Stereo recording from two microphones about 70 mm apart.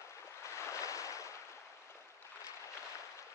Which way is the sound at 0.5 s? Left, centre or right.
Left.